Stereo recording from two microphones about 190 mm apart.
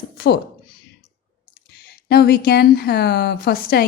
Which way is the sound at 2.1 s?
55° left (ahead or behind).